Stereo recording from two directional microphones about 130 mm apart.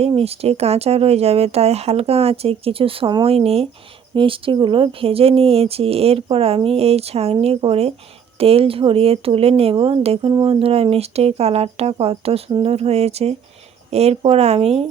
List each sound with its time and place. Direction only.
0.2 s speech: 50° right (ahead or behind)